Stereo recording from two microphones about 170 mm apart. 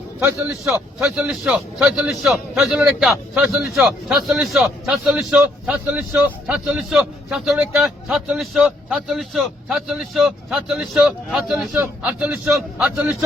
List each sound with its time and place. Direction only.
0.2 s a man's voice: 15° right (ahead or behind)